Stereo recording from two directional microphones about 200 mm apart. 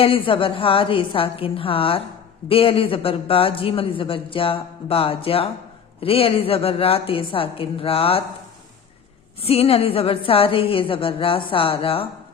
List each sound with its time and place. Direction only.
0.0 s speech: 25° left (ahead or behind)
9.4 s speech: 30° left (ahead or behind)